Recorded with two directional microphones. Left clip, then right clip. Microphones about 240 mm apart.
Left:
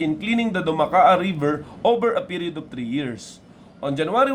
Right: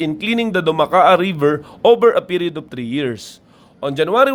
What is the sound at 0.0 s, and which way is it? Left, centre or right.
A man's voice, right.